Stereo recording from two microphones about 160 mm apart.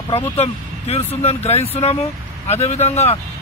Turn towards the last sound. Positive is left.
turn(degrees=40)  # may be behind; listen again after turning